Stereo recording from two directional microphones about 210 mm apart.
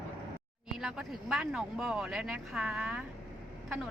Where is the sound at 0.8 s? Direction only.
Centre (ahead or behind).